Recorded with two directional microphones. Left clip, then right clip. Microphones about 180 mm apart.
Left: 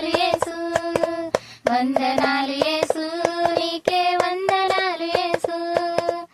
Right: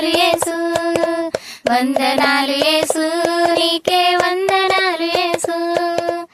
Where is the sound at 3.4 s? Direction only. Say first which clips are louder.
Right 6 dB; 40° right (ahead or behind).